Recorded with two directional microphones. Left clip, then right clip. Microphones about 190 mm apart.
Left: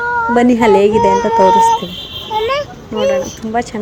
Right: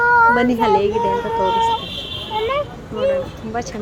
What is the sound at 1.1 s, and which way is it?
Speech, 45° left (ahead or behind).